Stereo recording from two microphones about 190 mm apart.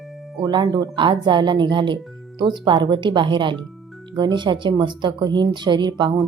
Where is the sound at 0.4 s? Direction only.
20° right (ahead or behind).